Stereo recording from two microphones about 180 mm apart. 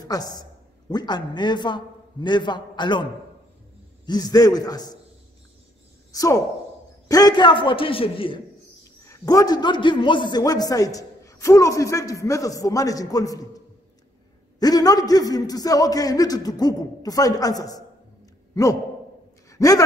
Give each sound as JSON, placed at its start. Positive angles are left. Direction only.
{"t": 0.0, "sound": "a man's voice", "side_deg": 20}
{"t": 6.1, "sound": "a man's voice", "side_deg": 20}
{"t": 9.0, "sound": "a man's voice", "side_deg": 20}
{"t": 14.6, "sound": "a man's voice", "side_deg": 20}
{"t": 19.5, "sound": "a sound", "side_deg": 20}